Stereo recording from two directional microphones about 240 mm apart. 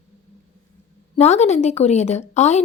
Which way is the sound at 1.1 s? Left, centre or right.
Left.